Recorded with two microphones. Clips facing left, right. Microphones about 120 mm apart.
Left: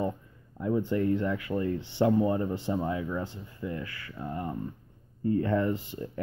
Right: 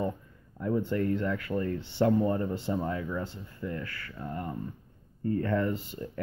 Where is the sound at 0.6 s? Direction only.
10° left (ahead or behind).